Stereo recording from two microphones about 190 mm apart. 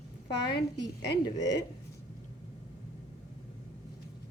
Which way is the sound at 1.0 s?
60° left (ahead or behind).